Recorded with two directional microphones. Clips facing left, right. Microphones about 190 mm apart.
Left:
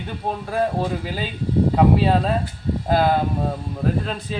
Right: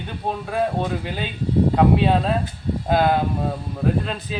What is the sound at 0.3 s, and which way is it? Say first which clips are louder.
Speech: even; centre (ahead or behind).